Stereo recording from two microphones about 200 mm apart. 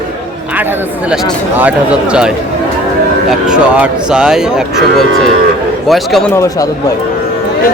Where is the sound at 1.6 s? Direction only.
5° right (ahead or behind).